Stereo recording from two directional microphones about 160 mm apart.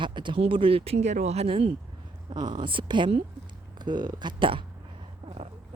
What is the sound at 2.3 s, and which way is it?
Speech, 30° right (ahead or behind).